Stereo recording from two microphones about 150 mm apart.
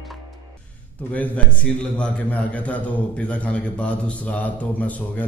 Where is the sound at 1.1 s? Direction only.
5° left (ahead or behind).